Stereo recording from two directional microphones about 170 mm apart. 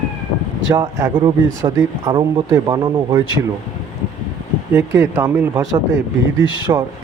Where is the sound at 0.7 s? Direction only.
15° right (ahead or behind).